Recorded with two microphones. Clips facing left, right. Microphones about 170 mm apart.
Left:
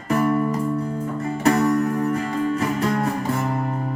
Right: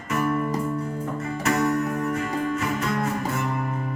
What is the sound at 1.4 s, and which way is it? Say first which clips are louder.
Music: left 5 dB; 35° left (ahead or behind).